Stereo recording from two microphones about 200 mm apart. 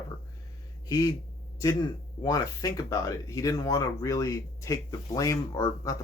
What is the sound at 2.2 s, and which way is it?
Speech, 20° left (ahead or behind).